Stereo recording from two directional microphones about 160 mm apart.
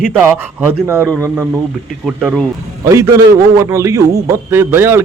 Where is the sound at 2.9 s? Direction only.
20° right (ahead or behind).